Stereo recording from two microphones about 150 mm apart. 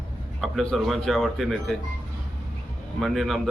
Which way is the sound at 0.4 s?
Centre (ahead or behind).